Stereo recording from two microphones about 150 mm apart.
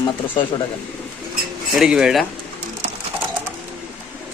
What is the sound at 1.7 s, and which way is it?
Speech, 5° right (ahead or behind).